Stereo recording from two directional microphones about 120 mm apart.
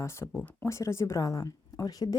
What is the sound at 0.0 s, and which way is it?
A woman's voice, 25° left (ahead or behind).